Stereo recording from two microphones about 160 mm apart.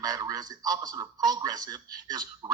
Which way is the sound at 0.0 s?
25° right (ahead or behind).